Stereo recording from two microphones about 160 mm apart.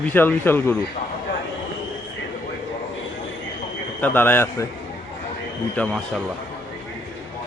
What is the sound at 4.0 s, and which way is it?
Speech, 10° left (ahead or behind).